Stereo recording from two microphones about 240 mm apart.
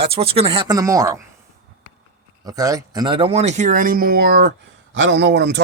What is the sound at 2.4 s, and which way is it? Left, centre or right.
Speech, centre.